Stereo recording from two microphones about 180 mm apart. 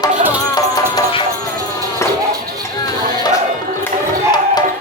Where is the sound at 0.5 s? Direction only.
20° left (ahead or behind).